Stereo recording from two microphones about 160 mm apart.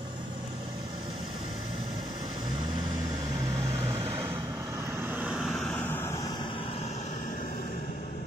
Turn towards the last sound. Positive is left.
turn(degrees=80)